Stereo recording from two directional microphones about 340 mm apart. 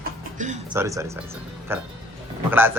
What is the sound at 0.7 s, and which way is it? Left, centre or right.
Speech, centre.